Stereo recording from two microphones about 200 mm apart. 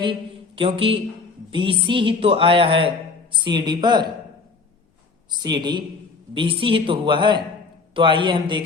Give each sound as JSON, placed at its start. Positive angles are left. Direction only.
{"t": 0.0, "sound": "mantra", "side_deg": -25}
{"t": 1.5, "sound": "speech", "side_deg": -25}
{"t": 5.3, "sound": "speech", "side_deg": -20}